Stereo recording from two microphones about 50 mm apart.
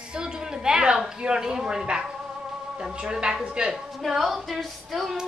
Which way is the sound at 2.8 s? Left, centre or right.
Centre.